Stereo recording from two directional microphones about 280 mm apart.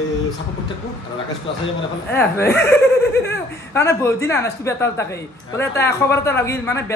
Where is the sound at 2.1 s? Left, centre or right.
Centre.